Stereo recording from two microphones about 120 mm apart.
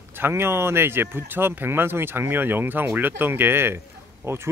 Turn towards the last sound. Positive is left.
turn(degrees=-20)  # may be behind; listen again after turning